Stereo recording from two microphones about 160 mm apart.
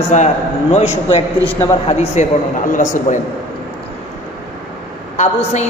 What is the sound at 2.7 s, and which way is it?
Speech, 50° left (ahead or behind).